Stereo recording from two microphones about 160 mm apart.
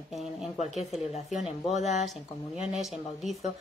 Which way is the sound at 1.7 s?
45° left (ahead or behind).